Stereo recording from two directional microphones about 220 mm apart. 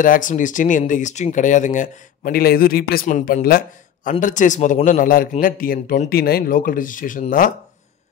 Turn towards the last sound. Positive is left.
turn(degrees=35)  # may be behind; listen again after turning